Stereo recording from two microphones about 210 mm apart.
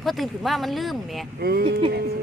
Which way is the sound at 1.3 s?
50° right (ahead or behind).